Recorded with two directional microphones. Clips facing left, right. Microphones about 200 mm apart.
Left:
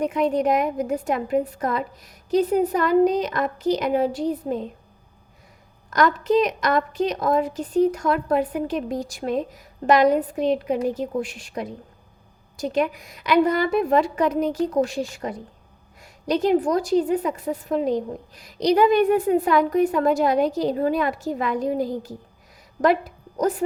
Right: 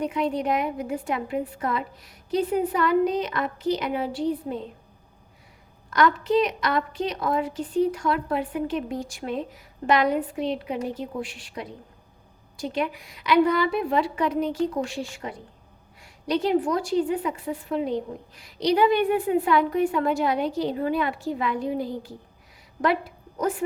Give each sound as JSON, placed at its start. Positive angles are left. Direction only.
{"t": 0.0, "sound": "a woman's voice", "side_deg": 45}
{"t": 5.9, "sound": "a woman's voice", "side_deg": 40}